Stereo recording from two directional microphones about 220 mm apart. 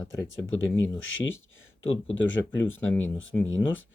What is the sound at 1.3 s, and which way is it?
Speech, 65° left (ahead or behind).